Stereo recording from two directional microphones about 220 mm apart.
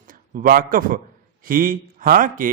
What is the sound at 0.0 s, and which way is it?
A man's voice, 40° right (ahead or behind).